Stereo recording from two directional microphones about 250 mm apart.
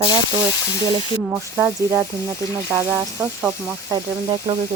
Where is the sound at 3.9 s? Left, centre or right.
Centre.